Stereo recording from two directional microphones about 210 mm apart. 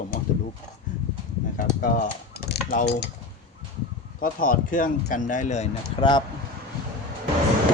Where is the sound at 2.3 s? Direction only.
50° left (ahead or behind).